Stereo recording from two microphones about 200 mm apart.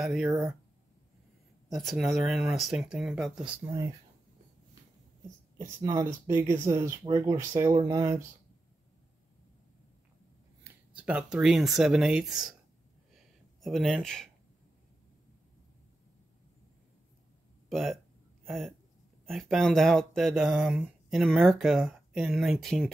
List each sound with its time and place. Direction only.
0.0 s speech: centre (ahead or behind)
1.7 s speech: centre (ahead or behind)
5.8 s speech: 15° right (ahead or behind)
11.0 s speech: 5° right (ahead or behind)
13.1 s a sound: centre (ahead or behind)
17.6 s speech: centre (ahead or behind)
19.2 s speech: centre (ahead or behind)